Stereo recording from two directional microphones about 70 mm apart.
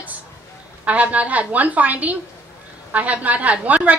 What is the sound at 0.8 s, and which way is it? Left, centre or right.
A woman's voice, centre.